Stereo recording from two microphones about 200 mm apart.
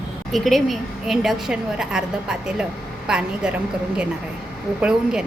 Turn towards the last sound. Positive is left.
turn(degrees=-5)  # may be behind; listen again after turning